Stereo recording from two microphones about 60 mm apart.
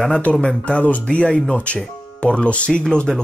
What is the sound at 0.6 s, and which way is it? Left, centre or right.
Speech, left.